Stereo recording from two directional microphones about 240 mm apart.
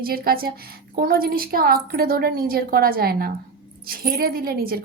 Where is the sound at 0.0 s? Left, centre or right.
Right.